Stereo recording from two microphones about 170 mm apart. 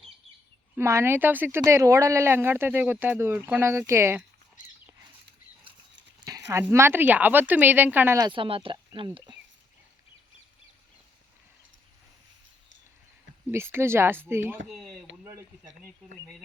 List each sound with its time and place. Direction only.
0.8 s speech: 15° right (ahead or behind)
6.2 s speech: 20° right (ahead or behind)
8.3 s speech: 30° right (ahead or behind)
13.5 s speech: 15° right (ahead or behind)
15.2 s a sound: 15° right (ahead or behind)